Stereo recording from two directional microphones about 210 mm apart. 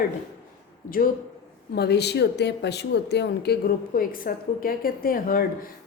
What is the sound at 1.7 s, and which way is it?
Speech, 50° left (ahead or behind).